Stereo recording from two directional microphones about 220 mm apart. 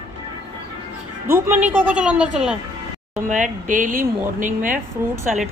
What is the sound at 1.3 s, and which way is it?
A woman's voice, 10° right (ahead or behind).